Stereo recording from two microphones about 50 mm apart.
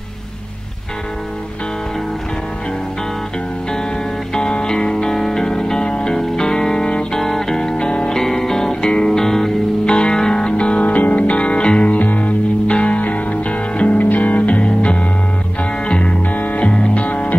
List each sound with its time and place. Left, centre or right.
4.3 s music: centre
8.2 s music: centre; by 17.4 s left